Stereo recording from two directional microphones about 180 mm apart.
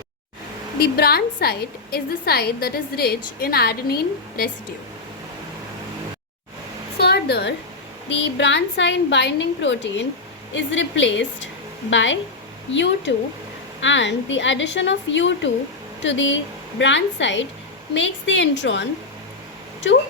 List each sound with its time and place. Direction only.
0.8 s a woman's voice: 60° left (ahead or behind)
7.0 s a sound: 65° left (ahead or behind)
8.1 s a woman's voice: 80° left
12.7 s a woman's voice: 80° left